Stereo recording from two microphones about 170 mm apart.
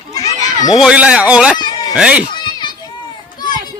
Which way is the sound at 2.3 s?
25° left (ahead or behind).